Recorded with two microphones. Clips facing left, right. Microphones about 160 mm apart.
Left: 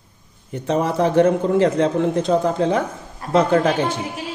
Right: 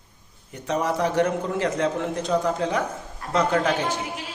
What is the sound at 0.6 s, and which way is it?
A man's voice, 30° left (ahead or behind).